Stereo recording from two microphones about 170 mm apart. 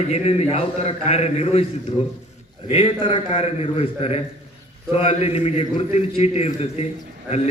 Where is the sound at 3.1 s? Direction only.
40° left (ahead or behind).